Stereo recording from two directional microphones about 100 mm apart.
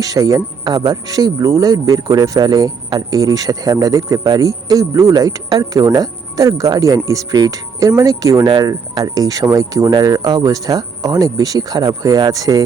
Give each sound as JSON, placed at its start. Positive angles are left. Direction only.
{"t": 0.0, "sound": "speech", "side_deg": -35}